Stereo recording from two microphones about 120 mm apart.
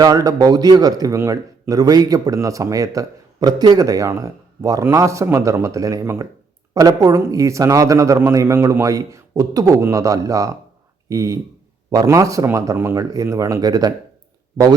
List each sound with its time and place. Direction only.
0.0 s a man's voice: 30° right (ahead or behind)